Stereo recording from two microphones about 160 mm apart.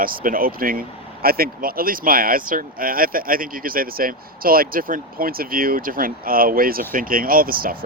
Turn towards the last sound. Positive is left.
turn(degrees=-65)  # may be behind; listen again after turning